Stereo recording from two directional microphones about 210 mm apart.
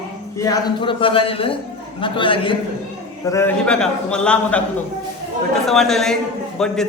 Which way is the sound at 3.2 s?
10° left (ahead or behind).